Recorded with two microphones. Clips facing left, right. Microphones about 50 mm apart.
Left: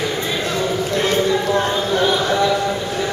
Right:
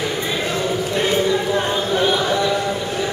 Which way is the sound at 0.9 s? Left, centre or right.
Centre.